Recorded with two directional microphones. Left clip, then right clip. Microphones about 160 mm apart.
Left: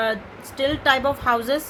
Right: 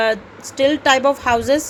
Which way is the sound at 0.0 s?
20° right (ahead or behind).